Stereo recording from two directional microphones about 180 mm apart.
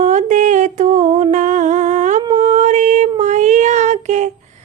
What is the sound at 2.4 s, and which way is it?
Music, 40° right (ahead or behind).